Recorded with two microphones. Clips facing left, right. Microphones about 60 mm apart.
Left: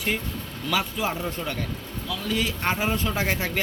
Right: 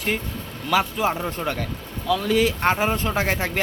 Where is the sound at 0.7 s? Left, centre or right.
Right.